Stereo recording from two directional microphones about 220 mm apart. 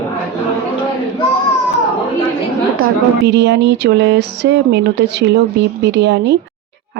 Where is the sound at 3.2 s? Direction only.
50° right (ahead or behind).